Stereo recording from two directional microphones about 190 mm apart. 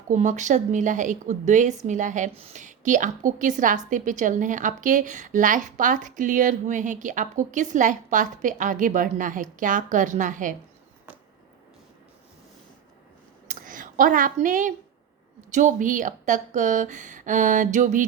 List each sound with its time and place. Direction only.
0.1 s a woman's voice: 40° right (ahead or behind)
13.5 s a sound: 45° right (ahead or behind)
15.4 s speech: 40° right (ahead or behind)